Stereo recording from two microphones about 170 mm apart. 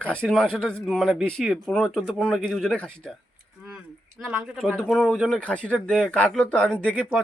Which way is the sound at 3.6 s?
5° right (ahead or behind).